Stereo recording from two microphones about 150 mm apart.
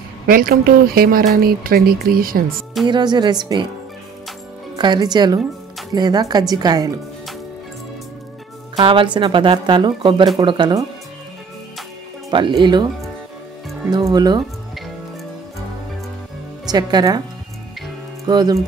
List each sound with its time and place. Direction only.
0.3 s speech: 80° right
2.9 s speech: 30° right (ahead or behind)
4.7 s speech: 30° right (ahead or behind)
8.7 s speech: 35° right (ahead or behind)
12.3 s speech: 30° right (ahead or behind)
13.8 s speech: 25° right (ahead or behind)
16.6 s speech: 25° right (ahead or behind)
18.2 s speech: 25° right (ahead or behind)